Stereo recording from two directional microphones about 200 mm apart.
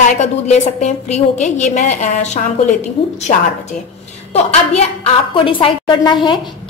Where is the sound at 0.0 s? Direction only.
35° left (ahead or behind).